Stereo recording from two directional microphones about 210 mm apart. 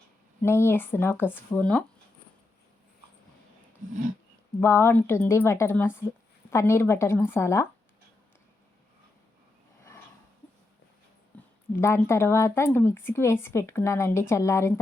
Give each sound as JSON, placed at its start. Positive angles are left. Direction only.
{"t": 0.4, "sound": "speech", "side_deg": 10}
{"t": 4.6, "sound": "speech", "side_deg": 10}
{"t": 11.3, "sound": "speech", "side_deg": 10}